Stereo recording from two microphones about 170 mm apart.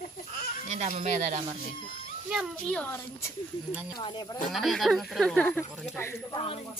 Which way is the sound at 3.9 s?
25° left (ahead or behind).